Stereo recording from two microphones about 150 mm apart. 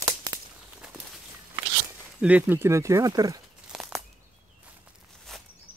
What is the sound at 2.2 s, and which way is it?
Speech, 10° right (ahead or behind).